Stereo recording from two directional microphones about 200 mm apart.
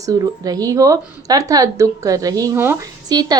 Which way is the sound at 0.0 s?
20° right (ahead or behind).